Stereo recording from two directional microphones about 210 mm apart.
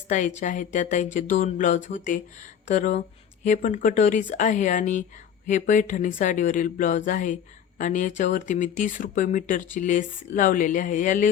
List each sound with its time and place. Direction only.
0.1 s speech: 35° left (ahead or behind)